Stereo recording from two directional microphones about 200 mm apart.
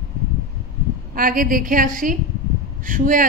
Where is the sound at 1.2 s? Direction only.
45° right (ahead or behind).